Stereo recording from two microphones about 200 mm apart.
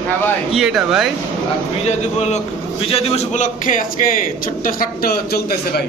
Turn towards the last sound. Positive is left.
turn(degrees=50)  # may be behind; listen again after turning